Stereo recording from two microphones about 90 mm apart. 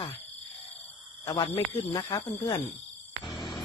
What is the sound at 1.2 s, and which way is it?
Speech, 50° left (ahead or behind).